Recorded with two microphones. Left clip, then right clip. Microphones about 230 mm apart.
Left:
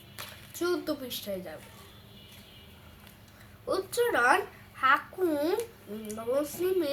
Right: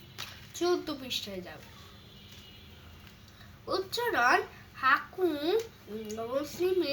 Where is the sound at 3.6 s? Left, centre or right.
Centre.